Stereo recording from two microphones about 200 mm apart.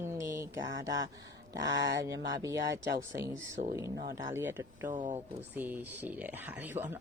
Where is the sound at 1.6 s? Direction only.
60° right (ahead or behind).